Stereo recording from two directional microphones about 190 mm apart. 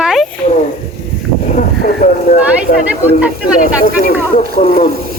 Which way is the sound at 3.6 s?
50° left (ahead or behind).